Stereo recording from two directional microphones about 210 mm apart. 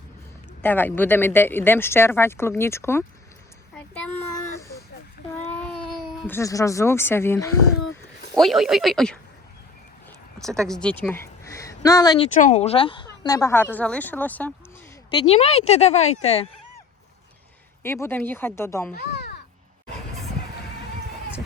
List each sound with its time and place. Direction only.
0.6 s speech: 10° left (ahead or behind)
3.8 s child singing: 5° left (ahead or behind)
5.5 s speech: 5° left (ahead or behind)
8.4 s speech: centre (ahead or behind)
10.3 s a sound: centre (ahead or behind)
10.7 s speech: 5° left (ahead or behind); by 12.3 s 20° left (ahead or behind)
12.3 s speech: 35° left (ahead or behind); by 14.5 s 10° left (ahead or behind)
15.1 s a woman's voice: 25° left (ahead or behind)
17.8 s speech: 10° left (ahead or behind)
18.9 s caw: 50° left (ahead or behind)